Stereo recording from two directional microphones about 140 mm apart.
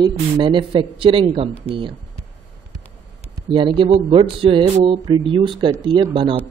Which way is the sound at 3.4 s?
35° right (ahead or behind).